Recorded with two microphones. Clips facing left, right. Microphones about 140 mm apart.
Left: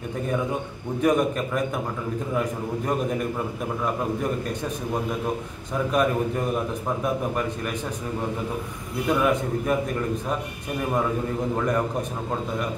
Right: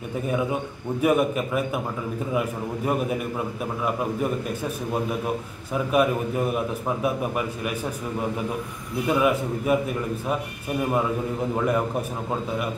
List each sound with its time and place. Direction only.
1.0 s a man's voice: 10° right (ahead or behind)
2.9 s a man's voice: 10° right (ahead or behind)
5.9 s a man's voice: 10° right (ahead or behind)
9.0 s a man's voice: 5° right (ahead or behind)
11.5 s a man's voice: 10° right (ahead or behind)